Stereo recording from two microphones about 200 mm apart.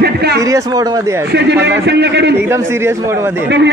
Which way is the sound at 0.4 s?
15° right (ahead or behind).